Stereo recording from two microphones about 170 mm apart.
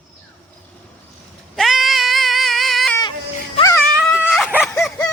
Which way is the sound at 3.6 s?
15° left (ahead or behind).